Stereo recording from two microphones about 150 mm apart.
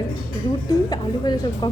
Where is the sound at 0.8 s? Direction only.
25° left (ahead or behind).